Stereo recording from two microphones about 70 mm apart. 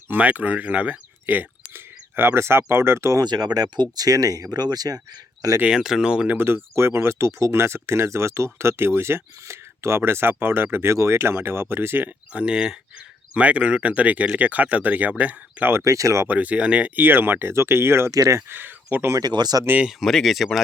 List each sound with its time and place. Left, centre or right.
0.1 s speech: right
3.2 s speech: right
5.6 s speech: centre
6.2 s speech: right
12.3 s speech: centre
15.7 s speech: right
16.2 s speech: right
17.0 s speech: right
18.1 s speech: right
18.4 s speech: right
19.2 s speech: right
20.0 s speech: centre